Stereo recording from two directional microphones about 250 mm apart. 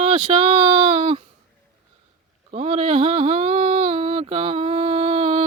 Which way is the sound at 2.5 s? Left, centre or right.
Right.